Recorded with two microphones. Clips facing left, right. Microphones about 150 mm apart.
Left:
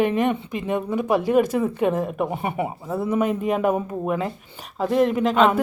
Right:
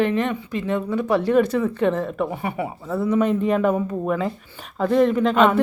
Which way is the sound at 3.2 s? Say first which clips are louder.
Right 2 dB; 5° left (ahead or behind).